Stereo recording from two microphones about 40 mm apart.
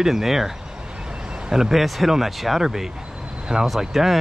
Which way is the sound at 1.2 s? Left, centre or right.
Centre.